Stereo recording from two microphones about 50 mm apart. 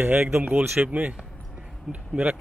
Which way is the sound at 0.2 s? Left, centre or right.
Right.